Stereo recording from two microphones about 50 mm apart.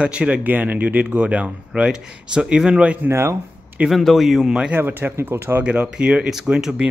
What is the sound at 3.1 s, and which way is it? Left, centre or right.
Speech, right.